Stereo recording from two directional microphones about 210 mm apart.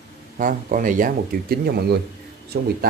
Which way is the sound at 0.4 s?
40° right (ahead or behind).